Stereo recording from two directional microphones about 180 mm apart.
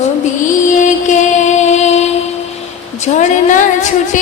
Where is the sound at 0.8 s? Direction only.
40° left (ahead or behind).